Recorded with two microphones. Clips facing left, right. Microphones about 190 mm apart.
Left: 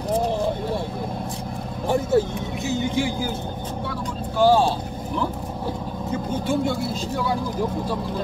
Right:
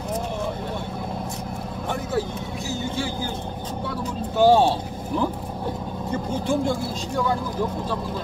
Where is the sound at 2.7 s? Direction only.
15° left (ahead or behind).